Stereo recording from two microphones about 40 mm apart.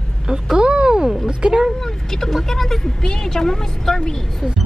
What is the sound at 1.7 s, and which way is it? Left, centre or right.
Speech, centre.